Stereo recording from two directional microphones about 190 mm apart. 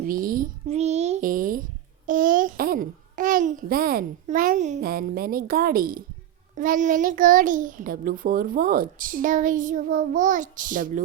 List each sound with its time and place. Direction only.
0.0 s a sound: 45° right (ahead or behind)
2.0 s a child's voice: 45° right (ahead or behind)
4.8 s a child's voice: 55° right (ahead or behind)